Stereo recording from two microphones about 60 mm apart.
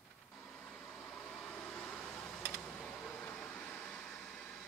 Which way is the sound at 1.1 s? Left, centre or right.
Centre.